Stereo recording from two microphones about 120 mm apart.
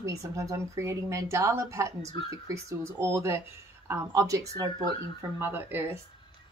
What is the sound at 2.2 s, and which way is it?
Speech, 45° left (ahead or behind).